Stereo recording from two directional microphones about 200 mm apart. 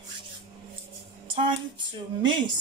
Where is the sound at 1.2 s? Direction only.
25° right (ahead or behind).